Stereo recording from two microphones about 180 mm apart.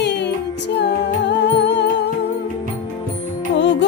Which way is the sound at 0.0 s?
70° left (ahead or behind).